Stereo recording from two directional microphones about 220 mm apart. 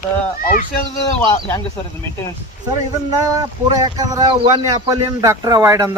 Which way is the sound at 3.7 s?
15° right (ahead or behind).